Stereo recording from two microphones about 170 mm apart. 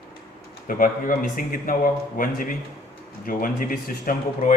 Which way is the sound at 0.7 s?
55° left (ahead or behind).